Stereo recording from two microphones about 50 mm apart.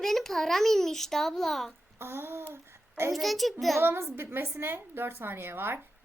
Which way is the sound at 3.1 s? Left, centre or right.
Centre.